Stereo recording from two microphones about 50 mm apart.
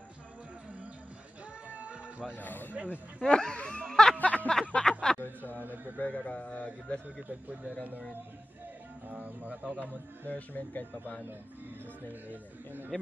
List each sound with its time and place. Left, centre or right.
1.7 s a sound: right
2.3 s speech: left
2.7 s speech: right
3.2 s speech: centre
3.8 s a sound: centre
4.2 s a sound: left
4.5 s a sound: centre
5.9 s speech: left
7.2 s speech: right
9.1 s speech: right
10.2 s speech: left
12.1 s speech: right